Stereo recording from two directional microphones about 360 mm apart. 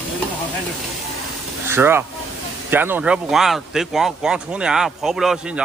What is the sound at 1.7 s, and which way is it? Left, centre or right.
Speech, centre.